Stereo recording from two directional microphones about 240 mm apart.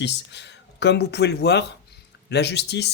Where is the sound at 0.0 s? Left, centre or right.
Left.